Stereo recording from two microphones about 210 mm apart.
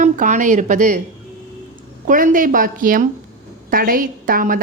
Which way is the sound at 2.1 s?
40° right (ahead or behind).